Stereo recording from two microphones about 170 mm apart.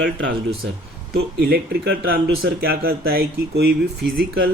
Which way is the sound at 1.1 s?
65° right (ahead or behind).